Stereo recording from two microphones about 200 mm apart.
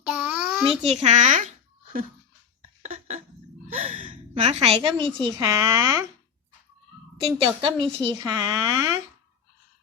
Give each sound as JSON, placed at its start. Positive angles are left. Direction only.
{"t": 0.1, "sound": "a sound", "side_deg": -5}
{"t": 0.8, "sound": "a child's voice", "side_deg": -35}
{"t": 2.8, "sound": "a sound", "side_deg": -35}
{"t": 3.8, "sound": "gasp", "side_deg": -30}
{"t": 4.5, "sound": "a woman's voice", "side_deg": -30}
{"t": 7.2, "sound": "speech", "side_deg": -25}